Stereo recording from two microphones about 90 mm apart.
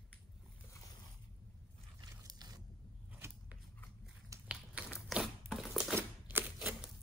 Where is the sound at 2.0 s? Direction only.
45° right (ahead or behind).